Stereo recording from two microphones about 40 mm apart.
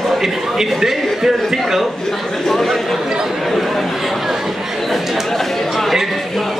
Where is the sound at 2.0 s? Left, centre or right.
Centre.